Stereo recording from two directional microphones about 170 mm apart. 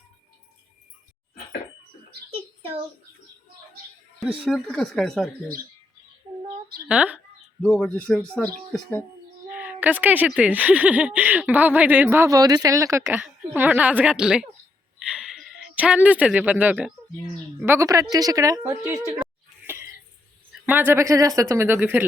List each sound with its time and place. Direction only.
2.6 s a sound: 35° right (ahead or behind)
4.2 s speech: centre (ahead or behind)
6.8 s speech: 5° right (ahead or behind)
7.6 s speech: 5° left (ahead or behind)
9.5 s speech: 10° right (ahead or behind)
14.9 s a sound: 5° right (ahead or behind)
17.7 s a woman's voice: 15° right (ahead or behind)
19.2 s a sound: 15° right (ahead or behind)
20.7 s speech: 10° right (ahead or behind)